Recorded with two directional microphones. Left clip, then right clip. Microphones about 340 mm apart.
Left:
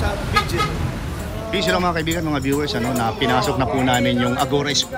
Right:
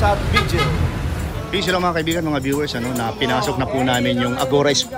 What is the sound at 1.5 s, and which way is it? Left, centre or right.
Speech, centre.